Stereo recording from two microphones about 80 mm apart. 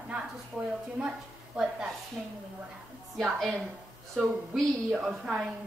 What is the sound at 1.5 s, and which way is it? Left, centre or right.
Speech, centre.